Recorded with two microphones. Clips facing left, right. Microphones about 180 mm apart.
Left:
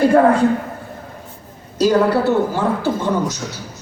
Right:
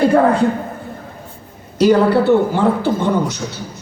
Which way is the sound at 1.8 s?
60° right (ahead or behind).